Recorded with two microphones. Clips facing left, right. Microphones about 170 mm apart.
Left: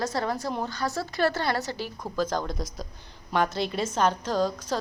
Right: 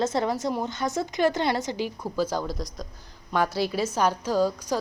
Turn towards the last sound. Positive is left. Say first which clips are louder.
# right 2 dB
turn(degrees=-10)  # may be behind; listen again after turning